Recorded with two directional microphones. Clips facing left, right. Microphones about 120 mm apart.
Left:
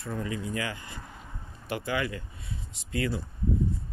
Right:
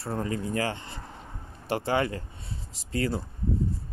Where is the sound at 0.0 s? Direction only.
35° right (ahead or behind).